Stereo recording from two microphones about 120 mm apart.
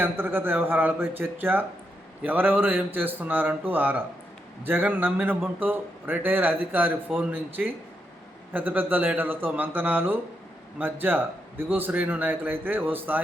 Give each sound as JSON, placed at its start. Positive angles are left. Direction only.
{"t": 0.0, "sound": "a man's voice", "side_deg": -20}